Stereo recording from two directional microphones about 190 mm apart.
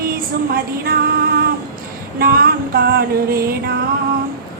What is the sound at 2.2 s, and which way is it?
Female singing, 50° right (ahead or behind).